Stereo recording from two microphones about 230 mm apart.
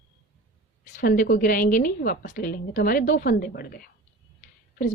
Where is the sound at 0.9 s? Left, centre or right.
Left.